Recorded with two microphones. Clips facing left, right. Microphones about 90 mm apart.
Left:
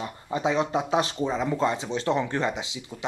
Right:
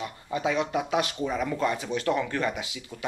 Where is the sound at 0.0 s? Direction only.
25° left (ahead or behind).